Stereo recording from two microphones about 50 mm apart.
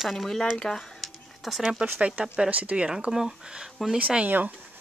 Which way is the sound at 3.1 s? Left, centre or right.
Centre.